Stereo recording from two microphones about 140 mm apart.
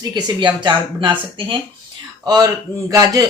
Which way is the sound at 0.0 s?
30° right (ahead or behind).